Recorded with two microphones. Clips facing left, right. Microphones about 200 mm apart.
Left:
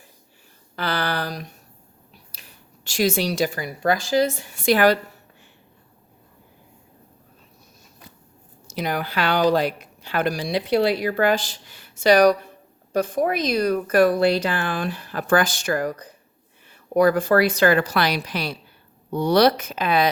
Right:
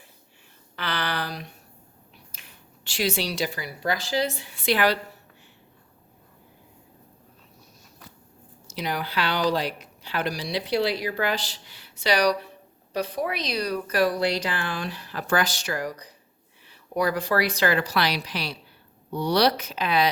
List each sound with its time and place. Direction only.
0.8 s a sound: 40° left (ahead or behind)
2.8 s speech: 45° left (ahead or behind)
8.6 s speech: 50° left (ahead or behind)